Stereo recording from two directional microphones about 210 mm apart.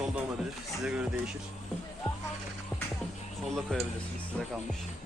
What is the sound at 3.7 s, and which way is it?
Speech, 5° left (ahead or behind).